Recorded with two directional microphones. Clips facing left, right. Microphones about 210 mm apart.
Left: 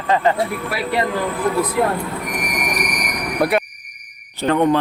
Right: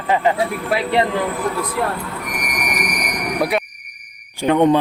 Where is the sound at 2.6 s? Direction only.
Centre (ahead or behind).